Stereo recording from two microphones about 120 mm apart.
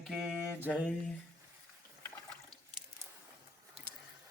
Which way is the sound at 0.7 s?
5° left (ahead or behind).